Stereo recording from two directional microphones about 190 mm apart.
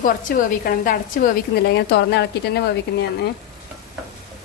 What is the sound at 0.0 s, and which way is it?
A woman's voice, 45° left (ahead or behind).